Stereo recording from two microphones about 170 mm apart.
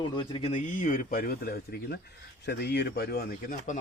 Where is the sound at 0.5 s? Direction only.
50° left (ahead or behind).